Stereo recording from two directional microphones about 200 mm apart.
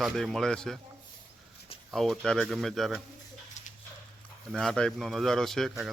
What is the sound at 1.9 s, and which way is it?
Speech, centre (ahead or behind).